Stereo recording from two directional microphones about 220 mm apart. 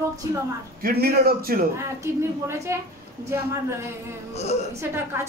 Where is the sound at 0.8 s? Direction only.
45° right (ahead or behind).